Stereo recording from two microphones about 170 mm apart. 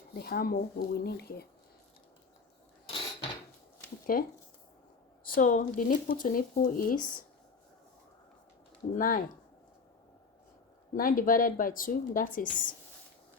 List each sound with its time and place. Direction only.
0.1 s a woman's voice: 65° left (ahead or behind)
4.1 s speech: 55° left (ahead or behind)
9.0 s speech: 55° left (ahead or behind)
10.9 s a woman's voice: 55° left (ahead or behind)